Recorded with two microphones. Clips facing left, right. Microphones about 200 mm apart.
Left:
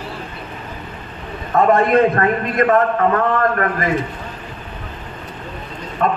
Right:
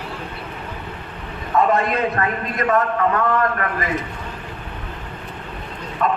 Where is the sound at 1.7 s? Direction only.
50° left (ahead or behind).